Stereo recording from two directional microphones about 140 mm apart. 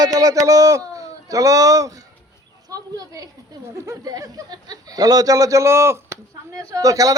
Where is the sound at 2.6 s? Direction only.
25° right (ahead or behind).